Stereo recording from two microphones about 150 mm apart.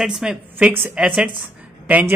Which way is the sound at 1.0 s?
5° right (ahead or behind).